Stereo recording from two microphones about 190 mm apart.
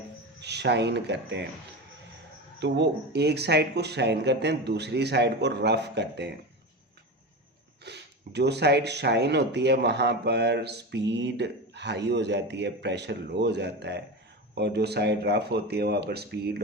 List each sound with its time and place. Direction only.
0.4 s speech: 60° right (ahead or behind)
2.6 s speech: 65° right (ahead or behind)
7.9 s speech: 65° right (ahead or behind)